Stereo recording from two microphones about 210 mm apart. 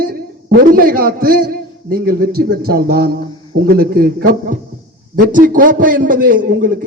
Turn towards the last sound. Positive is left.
turn(degrees=-40)  # may be behind; listen again after turning